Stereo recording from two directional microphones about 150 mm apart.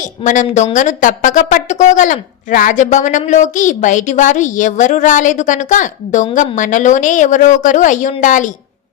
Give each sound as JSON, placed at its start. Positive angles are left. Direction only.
{"t": 0.3, "sound": "speech", "side_deg": 55}